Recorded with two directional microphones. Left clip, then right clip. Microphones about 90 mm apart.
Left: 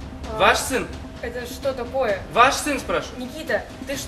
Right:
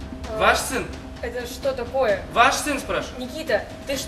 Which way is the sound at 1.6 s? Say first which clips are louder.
Right 1 dB; 15° right (ahead or behind).